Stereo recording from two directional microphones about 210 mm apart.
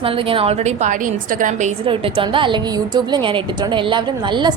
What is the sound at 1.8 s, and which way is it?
A woman's voice, 25° right (ahead or behind).